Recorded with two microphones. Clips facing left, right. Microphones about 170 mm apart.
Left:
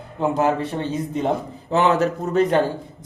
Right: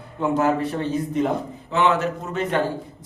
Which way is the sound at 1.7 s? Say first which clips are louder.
Left 2 dB; 40° left (ahead or behind).